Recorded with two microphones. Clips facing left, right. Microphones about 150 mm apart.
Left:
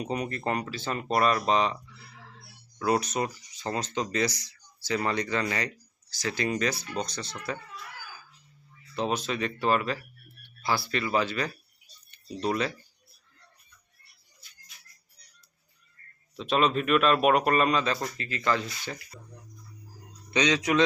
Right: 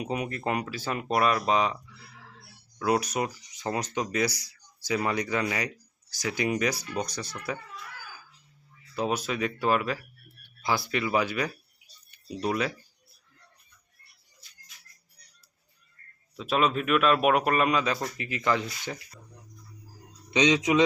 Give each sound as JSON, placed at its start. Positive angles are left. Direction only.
{"t": 0.0, "sound": "speech", "side_deg": -5}
{"t": 9.0, "sound": "speech", "side_deg": -10}
{"t": 16.3, "sound": "speech", "side_deg": -5}
{"t": 20.3, "sound": "speech", "side_deg": -20}